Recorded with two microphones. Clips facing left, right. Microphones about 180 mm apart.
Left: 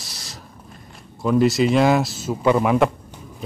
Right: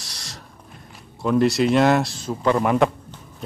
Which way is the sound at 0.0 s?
Centre (ahead or behind).